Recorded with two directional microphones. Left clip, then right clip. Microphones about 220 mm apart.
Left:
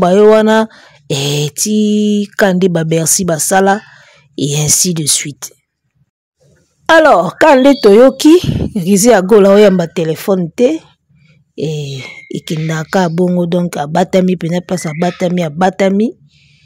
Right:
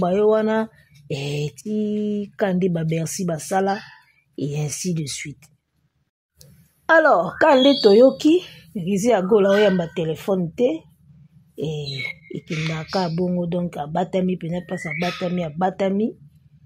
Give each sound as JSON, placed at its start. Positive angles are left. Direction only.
{"t": 0.0, "sound": "speech", "side_deg": 45}
{"t": 6.9, "sound": "speech", "side_deg": 40}